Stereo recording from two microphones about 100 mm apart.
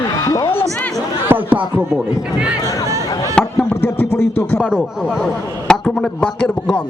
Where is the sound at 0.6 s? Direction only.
30° right (ahead or behind).